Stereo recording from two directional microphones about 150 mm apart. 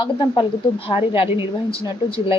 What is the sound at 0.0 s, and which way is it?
A woman's voice, 30° left (ahead or behind).